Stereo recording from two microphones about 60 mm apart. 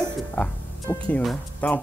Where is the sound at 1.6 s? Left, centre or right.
Left.